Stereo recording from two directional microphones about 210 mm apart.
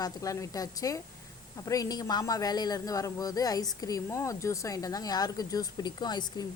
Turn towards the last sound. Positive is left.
turn(degrees=20)  # may be behind; listen again after turning